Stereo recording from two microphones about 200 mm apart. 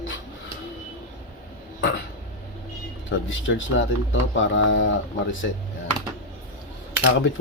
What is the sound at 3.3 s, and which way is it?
Speech, 75° left (ahead or behind).